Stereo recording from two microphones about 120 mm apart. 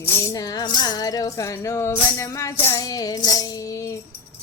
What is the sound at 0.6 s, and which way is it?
Music, 35° left (ahead or behind).